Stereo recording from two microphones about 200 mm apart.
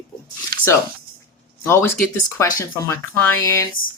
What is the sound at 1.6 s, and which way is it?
Speech, 10° left (ahead or behind).